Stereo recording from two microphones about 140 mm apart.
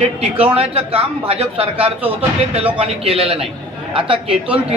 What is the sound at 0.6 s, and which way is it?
A man's voice, 45° right (ahead or behind).